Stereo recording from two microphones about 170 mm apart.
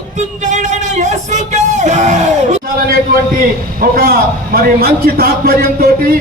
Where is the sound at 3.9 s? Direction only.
60° right (ahead or behind).